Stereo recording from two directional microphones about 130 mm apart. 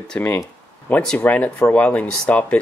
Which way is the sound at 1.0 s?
10° left (ahead or behind).